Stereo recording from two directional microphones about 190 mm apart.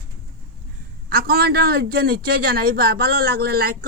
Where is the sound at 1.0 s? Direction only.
50° right (ahead or behind).